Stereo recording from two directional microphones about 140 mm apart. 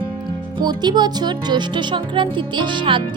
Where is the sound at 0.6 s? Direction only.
30° right (ahead or behind).